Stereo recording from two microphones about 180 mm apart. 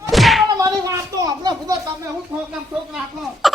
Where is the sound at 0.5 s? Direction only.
20° right (ahead or behind).